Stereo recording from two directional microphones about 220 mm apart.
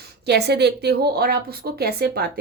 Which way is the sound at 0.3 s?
50° right (ahead or behind).